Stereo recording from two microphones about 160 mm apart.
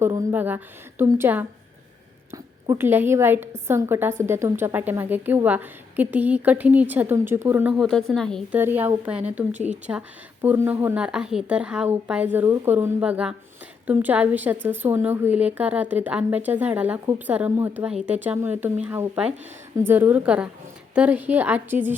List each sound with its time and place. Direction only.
0.0 s a woman's voice: 20° right (ahead or behind)
7.8 s speech: centre (ahead or behind)
8.5 s a woman's voice: 10° right (ahead or behind)